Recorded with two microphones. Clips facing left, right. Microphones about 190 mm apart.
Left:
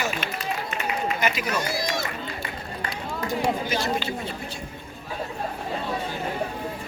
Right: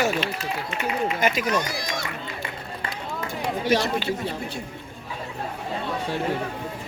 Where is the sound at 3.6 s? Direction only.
60° right (ahead or behind).